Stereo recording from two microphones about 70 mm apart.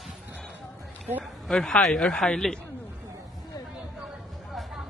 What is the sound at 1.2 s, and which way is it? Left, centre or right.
Speech, centre.